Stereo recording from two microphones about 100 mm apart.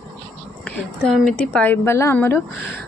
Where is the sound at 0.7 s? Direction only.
5° left (ahead or behind); by 2.4 s 20° left (ahead or behind).